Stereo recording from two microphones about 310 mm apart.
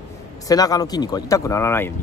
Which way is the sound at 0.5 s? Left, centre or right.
Centre.